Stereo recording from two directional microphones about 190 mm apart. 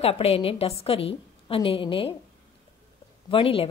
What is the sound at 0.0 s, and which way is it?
Speech, 30° left (ahead or behind).